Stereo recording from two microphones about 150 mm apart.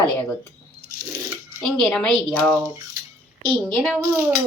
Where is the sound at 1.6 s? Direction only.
5° left (ahead or behind).